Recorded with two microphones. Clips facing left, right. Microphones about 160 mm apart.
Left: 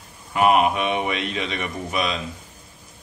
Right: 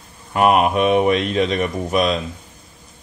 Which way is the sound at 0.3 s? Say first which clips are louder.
Right 2 dB; 45° right (ahead or behind).